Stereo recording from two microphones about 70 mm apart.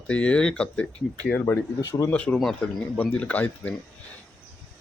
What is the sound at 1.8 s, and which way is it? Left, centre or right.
Speech, left.